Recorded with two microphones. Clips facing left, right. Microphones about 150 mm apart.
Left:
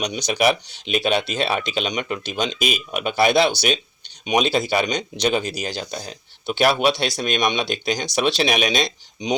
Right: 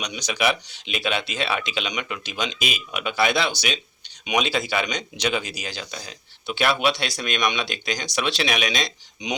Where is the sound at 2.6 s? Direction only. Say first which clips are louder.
Left 5 dB; 45° left (ahead or behind).